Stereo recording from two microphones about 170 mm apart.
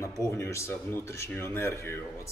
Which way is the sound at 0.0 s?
15° left (ahead or behind).